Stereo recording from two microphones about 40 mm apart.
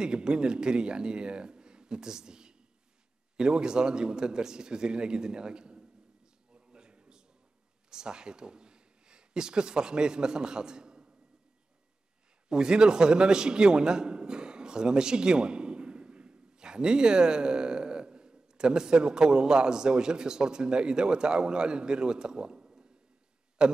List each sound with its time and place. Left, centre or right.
0.0 s speech: right
6.5 s a sound: right
7.9 s speech: centre
12.4 s a man's voice: centre